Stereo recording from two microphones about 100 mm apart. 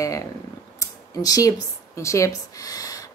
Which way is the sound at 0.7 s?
35° left (ahead or behind).